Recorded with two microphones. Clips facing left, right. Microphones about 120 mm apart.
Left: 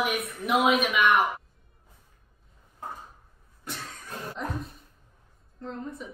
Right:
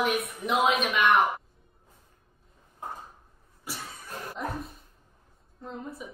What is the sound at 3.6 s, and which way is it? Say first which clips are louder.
Cough: left 1 dB; 5° right (ahead or behind).